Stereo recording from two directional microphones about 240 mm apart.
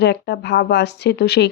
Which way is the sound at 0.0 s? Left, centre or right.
Left.